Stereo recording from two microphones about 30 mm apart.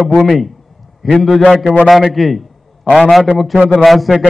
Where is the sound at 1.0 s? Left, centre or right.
Centre.